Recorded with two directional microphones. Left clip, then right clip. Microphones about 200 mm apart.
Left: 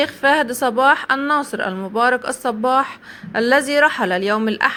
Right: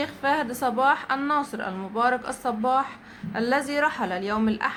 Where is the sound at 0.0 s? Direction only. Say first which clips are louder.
Left 9 dB; 35° left (ahead or behind).